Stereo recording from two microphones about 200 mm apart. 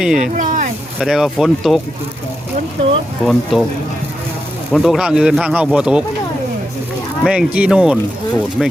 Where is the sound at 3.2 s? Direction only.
Centre (ahead or behind).